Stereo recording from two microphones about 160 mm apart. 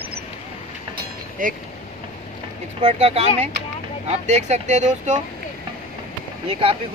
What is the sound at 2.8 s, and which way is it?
Speech, 40° right (ahead or behind).